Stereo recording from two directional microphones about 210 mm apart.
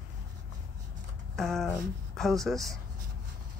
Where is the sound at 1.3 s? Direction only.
Centre (ahead or behind).